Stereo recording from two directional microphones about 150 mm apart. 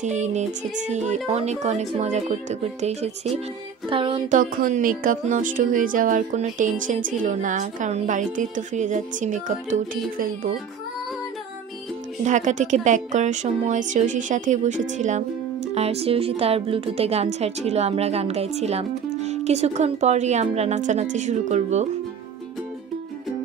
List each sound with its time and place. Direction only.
0.0 s a woman's voice: 50° right (ahead or behind)
3.9 s a sound: 35° right (ahead or behind)
4.3 s speech: 65° right (ahead or behind)
12.2 s a woman's voice: 55° right (ahead or behind)